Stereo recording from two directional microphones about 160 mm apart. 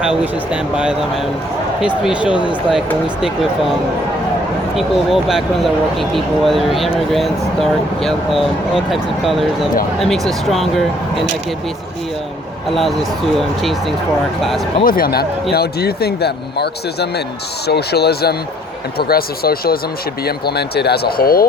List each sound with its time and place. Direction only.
0.0 s speech: 5° right (ahead or behind)
4.7 s speech: centre (ahead or behind)
12.7 s speech: centre (ahead or behind)
14.8 s speech: 65° left (ahead or behind)
20.2 s speech: 85° left; by 21.4 s 70° left (ahead or behind)